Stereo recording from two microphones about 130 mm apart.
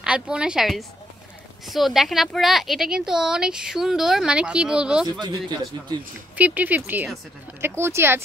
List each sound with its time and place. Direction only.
0.0 s a woman's voice: 5° right (ahead or behind)
5.2 s speech: 30° right (ahead or behind)
6.3 s a woman's voice: 10° right (ahead or behind)